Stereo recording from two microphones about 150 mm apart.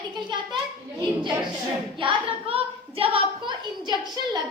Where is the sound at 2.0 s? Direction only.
35° right (ahead or behind).